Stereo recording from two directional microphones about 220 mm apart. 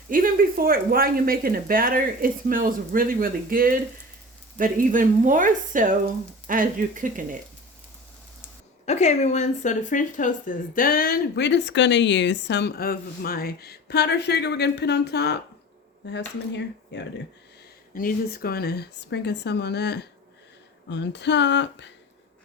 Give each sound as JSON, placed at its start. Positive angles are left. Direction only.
{"t": 0.1, "sound": "speech", "side_deg": -40}
{"t": 8.9, "sound": "speech", "side_deg": 30}
{"t": 17.9, "sound": "speech", "side_deg": 40}